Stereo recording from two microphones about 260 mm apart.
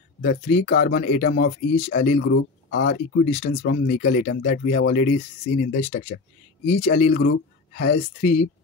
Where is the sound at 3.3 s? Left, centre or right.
Left.